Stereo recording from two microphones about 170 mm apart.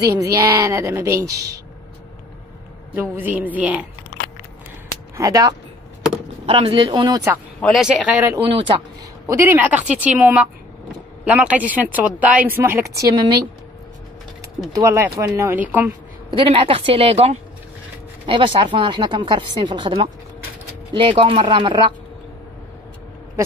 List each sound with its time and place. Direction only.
0.3 s speech: 15° right (ahead or behind)
3.0 s speech: 10° right (ahead or behind)
5.1 s speech: 20° right (ahead or behind)
6.4 s speech: 30° right (ahead or behind)
7.6 s speech: centre (ahead or behind)
8.5 s a woman's voice: 30° right (ahead or behind)
9.3 s speech: 15° right (ahead or behind)
14.7 s speech: 15° right (ahead or behind)
16.3 s a woman's voice: 30° right (ahead or behind)
21.2 s speech: 30° right (ahead or behind)